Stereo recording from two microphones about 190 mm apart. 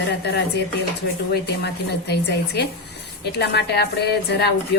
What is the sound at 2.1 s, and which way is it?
A woman's voice, 60° left (ahead or behind).